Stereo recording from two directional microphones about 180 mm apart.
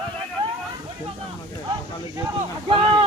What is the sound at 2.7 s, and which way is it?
Speech, 25° right (ahead or behind).